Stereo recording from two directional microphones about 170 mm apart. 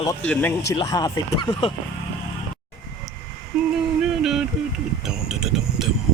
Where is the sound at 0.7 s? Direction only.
20° left (ahead or behind).